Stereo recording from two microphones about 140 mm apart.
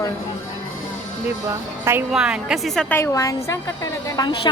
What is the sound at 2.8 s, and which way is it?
A woman's voice, 15° left (ahead or behind).